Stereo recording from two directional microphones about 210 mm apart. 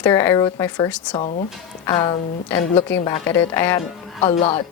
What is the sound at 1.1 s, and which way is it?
Speech, 30° left (ahead or behind).